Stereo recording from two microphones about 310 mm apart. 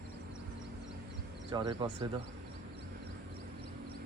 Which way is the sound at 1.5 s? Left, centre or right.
Centre.